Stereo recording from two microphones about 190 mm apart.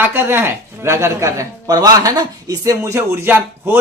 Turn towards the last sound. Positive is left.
turn(degrees=-10)  # may be behind; listen again after turning